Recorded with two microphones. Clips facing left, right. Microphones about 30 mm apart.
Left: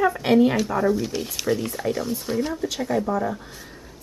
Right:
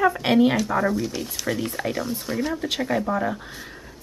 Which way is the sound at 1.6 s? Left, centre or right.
Centre.